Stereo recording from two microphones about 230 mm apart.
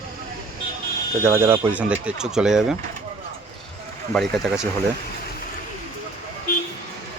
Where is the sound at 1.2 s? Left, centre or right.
Centre.